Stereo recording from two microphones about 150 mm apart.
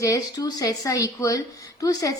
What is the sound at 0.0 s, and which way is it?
A woman's voice, 25° left (ahead or behind).